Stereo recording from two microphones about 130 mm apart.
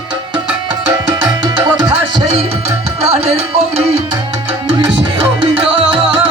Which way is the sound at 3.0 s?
50° right (ahead or behind).